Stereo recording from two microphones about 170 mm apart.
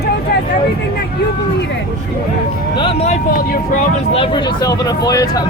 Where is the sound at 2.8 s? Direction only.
35° left (ahead or behind).